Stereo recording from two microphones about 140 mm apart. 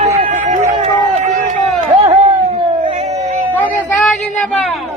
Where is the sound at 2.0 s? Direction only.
45° right (ahead or behind).